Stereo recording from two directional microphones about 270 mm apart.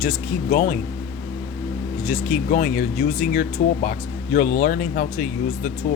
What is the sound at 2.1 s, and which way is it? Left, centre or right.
Speech, left.